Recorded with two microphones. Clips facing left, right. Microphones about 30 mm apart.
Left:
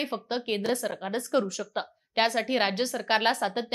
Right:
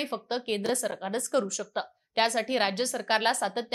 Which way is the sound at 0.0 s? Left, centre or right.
Centre.